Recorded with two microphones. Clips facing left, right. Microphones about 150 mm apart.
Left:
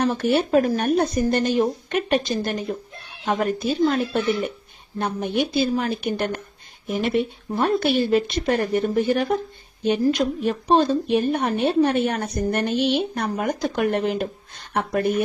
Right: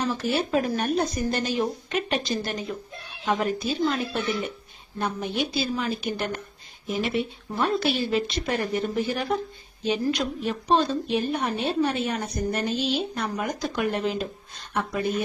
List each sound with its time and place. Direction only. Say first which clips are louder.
0.0 s a woman's voice: left 5 dB; 60° left (ahead or behind)